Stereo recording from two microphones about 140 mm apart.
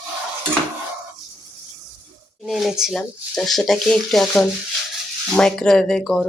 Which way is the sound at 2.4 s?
Centre (ahead or behind).